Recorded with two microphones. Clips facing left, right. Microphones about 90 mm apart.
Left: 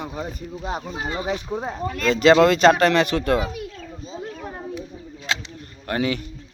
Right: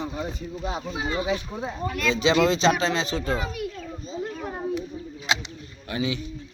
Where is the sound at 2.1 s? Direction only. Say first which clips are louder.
Left 7 dB; 55° left (ahead or behind).